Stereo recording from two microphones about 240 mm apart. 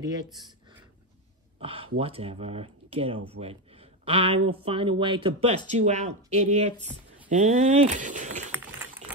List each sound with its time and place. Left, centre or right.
0.0 s speech: centre
1.6 s speech: right